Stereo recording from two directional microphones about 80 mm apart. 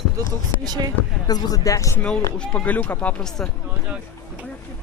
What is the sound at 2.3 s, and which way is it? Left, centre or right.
Speech, centre.